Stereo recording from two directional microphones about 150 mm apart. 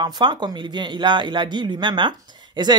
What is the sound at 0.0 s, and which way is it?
Speech, 30° right (ahead or behind).